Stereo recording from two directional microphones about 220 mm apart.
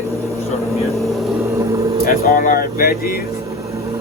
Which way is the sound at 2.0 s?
40° left (ahead or behind).